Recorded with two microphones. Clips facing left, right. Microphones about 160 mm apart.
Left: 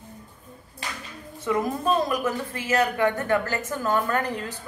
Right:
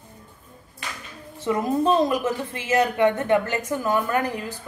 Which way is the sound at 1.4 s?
25° right (ahead or behind).